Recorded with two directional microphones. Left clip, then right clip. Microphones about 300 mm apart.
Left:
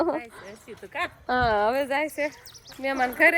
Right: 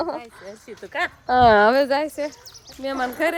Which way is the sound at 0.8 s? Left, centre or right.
Right.